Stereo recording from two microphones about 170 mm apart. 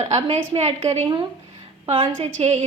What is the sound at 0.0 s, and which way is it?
A woman's voice, 40° right (ahead or behind).